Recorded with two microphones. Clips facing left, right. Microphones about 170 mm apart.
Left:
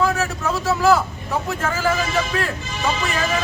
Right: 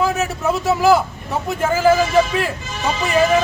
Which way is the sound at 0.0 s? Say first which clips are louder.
Right 1 dB; 20° right (ahead or behind).